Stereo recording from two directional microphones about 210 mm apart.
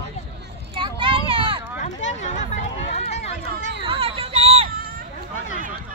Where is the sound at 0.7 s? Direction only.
25° right (ahead or behind).